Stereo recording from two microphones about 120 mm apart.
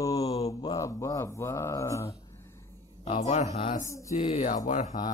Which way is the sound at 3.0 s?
65° left (ahead or behind).